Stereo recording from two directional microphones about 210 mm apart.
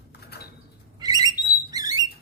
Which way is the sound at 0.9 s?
20° right (ahead or behind).